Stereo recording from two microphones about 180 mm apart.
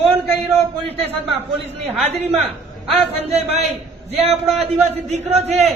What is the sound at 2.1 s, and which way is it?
A man's voice, 35° right (ahead or behind).